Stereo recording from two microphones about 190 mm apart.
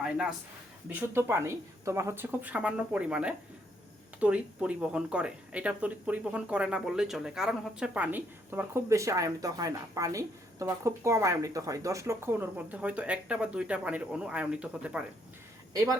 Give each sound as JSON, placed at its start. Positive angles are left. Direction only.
{"t": 0.9, "sound": "speech", "side_deg": -10}
{"t": 15.7, "sound": "speech", "side_deg": -20}